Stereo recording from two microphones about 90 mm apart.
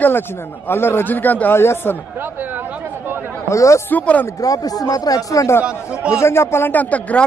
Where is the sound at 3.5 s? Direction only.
35° left (ahead or behind).